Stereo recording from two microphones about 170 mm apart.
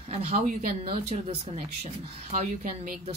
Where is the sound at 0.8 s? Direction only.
35° right (ahead or behind).